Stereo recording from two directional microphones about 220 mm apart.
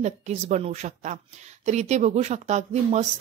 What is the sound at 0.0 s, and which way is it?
Speech, 30° right (ahead or behind).